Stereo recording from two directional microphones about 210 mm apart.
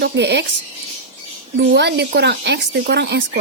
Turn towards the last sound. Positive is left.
turn(degrees=-55)  # may be behind; listen again after turning